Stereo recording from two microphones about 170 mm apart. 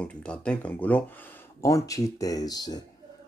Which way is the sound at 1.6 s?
20° left (ahead or behind).